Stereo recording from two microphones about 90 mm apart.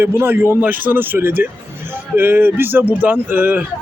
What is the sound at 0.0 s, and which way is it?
A man's voice, 25° right (ahead or behind).